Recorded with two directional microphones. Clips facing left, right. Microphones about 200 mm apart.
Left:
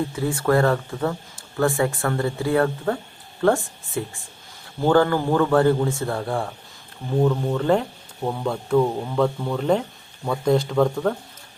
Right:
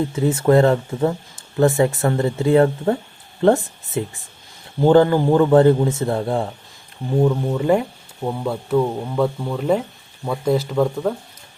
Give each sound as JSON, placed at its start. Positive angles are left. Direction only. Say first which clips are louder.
{"t": 0.2, "sound": "a man's voice", "louder": "right 5 dB", "side_deg": -20}
{"t": 7.2, "sound": "speech", "louder": "right 2 dB", "side_deg": -10}